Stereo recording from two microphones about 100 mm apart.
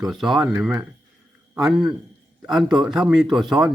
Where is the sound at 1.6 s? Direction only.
5° right (ahead or behind).